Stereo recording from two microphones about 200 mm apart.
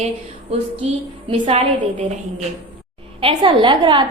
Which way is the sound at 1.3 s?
30° right (ahead or behind).